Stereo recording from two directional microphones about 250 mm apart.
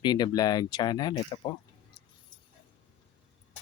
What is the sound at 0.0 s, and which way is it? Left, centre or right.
Speech, centre.